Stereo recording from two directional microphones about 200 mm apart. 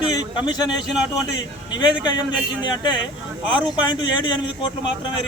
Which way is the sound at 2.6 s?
20° left (ahead or behind).